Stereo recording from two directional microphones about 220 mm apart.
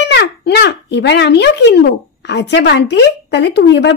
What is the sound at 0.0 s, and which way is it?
A child's voice, 50° left (ahead or behind).